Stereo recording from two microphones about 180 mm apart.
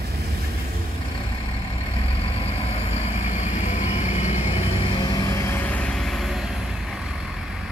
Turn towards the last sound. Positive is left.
turn(degrees=0)  # may be behind; listen again after turning